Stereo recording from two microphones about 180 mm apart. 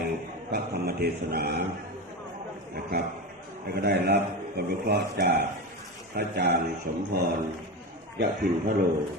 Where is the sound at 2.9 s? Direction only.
65° right (ahead or behind).